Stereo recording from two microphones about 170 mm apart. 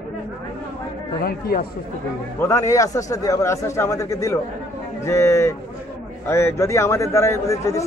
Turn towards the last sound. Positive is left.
turn(degrees=20)  # may be behind; listen again after turning